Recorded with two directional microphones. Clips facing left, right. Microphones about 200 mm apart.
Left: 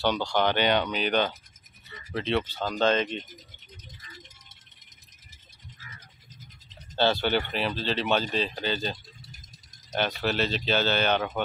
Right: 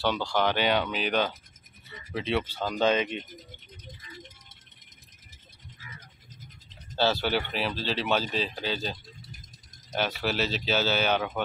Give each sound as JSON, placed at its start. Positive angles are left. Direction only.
{"t": 0.0, "sound": "speech", "side_deg": -5}
{"t": 3.8, "sound": "music", "side_deg": -55}
{"t": 7.0, "sound": "speech", "side_deg": -5}
{"t": 10.2, "sound": "speech", "side_deg": -5}